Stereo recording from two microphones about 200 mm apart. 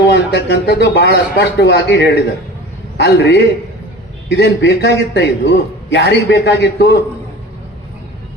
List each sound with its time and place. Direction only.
0.1 s a man's voice: 60° left (ahead or behind)